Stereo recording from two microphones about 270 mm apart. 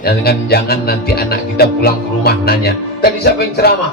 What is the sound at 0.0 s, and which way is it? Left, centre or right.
Music, left.